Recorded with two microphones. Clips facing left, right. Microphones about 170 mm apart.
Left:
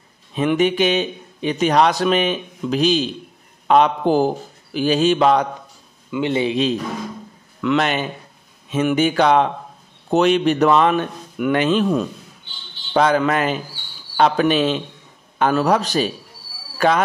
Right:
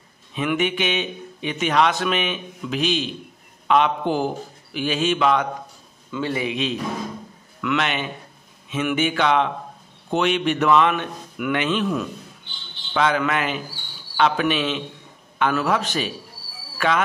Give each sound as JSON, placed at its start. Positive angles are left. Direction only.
{"t": 0.3, "sound": "a man's voice", "side_deg": 35}
{"t": 6.1, "sound": "a man's voice", "side_deg": 25}